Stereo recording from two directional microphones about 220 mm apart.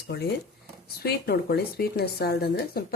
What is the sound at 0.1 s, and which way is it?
Speech, 50° left (ahead or behind).